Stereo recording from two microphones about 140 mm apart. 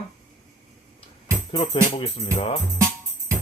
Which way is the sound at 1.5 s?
50° left (ahead or behind).